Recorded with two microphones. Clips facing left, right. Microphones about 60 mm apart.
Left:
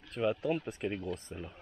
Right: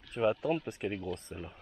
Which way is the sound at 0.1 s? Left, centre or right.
Centre.